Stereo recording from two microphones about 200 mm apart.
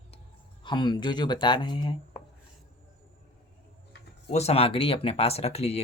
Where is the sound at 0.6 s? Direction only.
20° left (ahead or behind).